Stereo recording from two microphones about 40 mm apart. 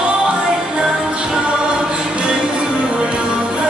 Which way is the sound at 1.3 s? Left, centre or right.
Right.